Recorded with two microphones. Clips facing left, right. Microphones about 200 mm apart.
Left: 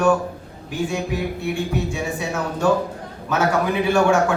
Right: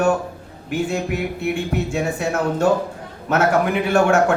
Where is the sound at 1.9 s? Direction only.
65° right (ahead or behind).